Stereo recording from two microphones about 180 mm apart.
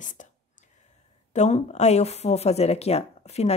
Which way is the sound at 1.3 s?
40° left (ahead or behind).